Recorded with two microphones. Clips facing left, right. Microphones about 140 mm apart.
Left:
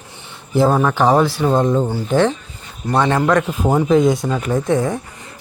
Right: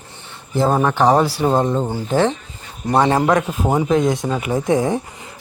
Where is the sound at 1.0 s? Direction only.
Centre (ahead or behind).